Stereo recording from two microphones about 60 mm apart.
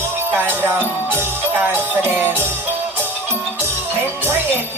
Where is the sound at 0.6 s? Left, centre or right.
Right.